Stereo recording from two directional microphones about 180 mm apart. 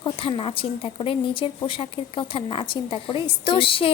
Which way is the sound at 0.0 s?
30° left (ahead or behind).